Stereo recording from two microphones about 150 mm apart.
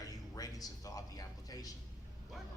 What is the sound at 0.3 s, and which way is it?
Speech, 25° left (ahead or behind).